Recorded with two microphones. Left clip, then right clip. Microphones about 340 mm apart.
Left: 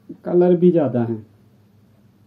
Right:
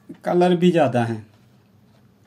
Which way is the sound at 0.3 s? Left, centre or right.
Centre.